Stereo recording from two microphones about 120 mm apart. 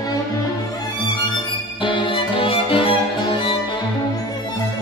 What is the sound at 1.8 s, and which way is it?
Music, 45° left (ahead or behind).